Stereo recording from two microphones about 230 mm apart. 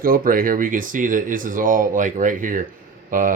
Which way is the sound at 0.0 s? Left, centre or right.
Right.